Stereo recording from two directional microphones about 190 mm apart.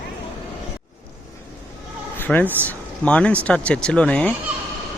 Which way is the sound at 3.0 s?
5° left (ahead or behind).